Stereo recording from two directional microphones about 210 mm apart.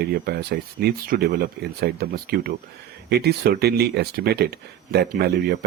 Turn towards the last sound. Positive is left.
turn(degrees=-50)  # may be behind; listen again after turning